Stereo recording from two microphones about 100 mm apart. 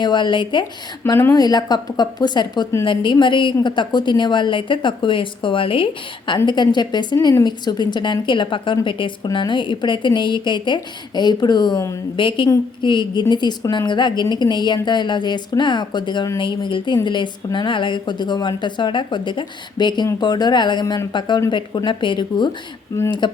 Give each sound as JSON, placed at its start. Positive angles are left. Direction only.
{"t": 0.0, "sound": "a woman's voice", "side_deg": 50}
{"t": 1.0, "sound": "speech", "side_deg": 30}
{"t": 1.3, "sound": "a woman's voice", "side_deg": 40}